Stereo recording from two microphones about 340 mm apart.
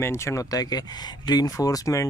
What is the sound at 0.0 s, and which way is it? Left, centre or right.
Speech, centre.